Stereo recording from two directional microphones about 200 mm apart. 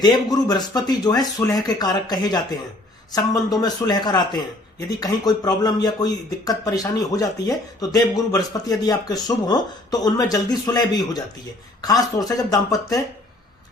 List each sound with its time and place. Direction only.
0.0 s speech: 20° left (ahead or behind)
3.6 s speech: 20° left (ahead or behind)